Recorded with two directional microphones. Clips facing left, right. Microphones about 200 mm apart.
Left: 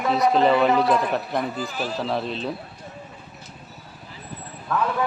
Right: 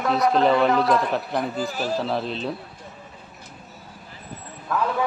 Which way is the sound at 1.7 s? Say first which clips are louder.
Right 2 dB; 45° right (ahead or behind).